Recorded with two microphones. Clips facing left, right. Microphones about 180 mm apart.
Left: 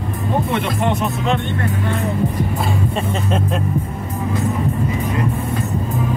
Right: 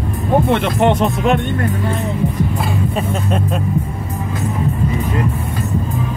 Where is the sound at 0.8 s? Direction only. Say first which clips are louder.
Right 5 dB; 80° right.